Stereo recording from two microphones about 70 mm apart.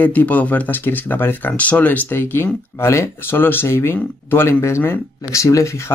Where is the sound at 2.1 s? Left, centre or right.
Left.